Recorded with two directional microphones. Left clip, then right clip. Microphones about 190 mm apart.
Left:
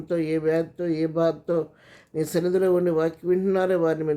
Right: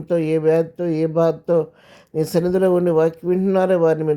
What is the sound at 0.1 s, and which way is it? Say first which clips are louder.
Speech: right 6 dB; 30° right (ahead or behind).